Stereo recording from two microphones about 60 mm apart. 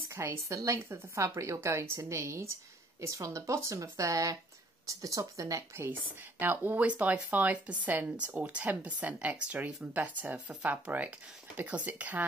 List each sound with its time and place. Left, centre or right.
0.1 s speech: right
0.7 s a woman's voice: right
6.4 s speech: right